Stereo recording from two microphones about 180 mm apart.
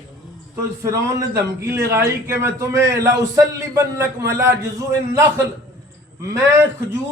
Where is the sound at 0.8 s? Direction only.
15° right (ahead or behind).